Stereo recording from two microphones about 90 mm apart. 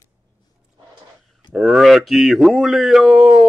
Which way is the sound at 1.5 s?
Centre (ahead or behind).